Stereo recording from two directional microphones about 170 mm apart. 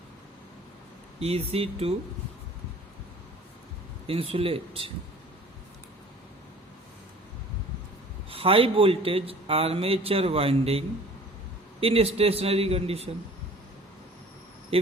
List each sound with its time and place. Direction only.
1.2 s speech: 35° right (ahead or behind)
4.0 s speech: 35° right (ahead or behind)
8.3 s speech: 35° right (ahead or behind)
14.7 s speech: 35° right (ahead or behind)